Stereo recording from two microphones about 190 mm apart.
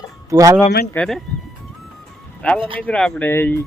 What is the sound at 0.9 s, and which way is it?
Speech, centre (ahead or behind).